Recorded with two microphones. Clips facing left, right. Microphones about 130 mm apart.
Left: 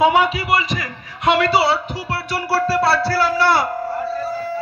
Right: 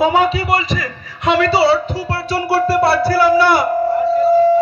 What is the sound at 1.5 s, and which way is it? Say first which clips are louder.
Music: right 4 dB; 35° right (ahead or behind).